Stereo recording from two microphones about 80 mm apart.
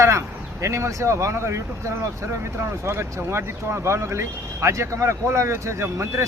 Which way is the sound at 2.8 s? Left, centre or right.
Right.